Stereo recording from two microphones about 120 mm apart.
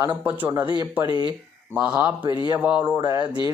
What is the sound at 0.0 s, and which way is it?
Speech, 15° right (ahead or behind).